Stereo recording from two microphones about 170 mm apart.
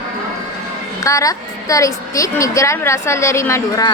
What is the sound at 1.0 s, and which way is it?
Speech, 20° left (ahead or behind).